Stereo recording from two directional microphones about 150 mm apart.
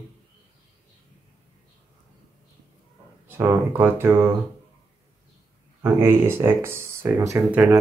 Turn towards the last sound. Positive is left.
turn(degrees=-10)  # may be behind; listen again after turning